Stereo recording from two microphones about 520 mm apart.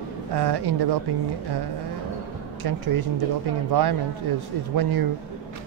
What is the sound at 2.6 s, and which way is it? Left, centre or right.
Speech, right.